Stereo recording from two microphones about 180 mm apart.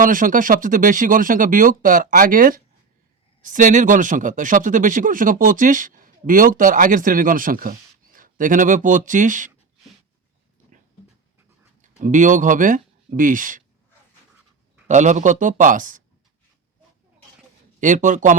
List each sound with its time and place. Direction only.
0.0 s speech: 50° right (ahead or behind)
11.8 s speech: 45° right (ahead or behind)
14.8 s speech: 40° right (ahead or behind)
17.7 s speech: 45° right (ahead or behind)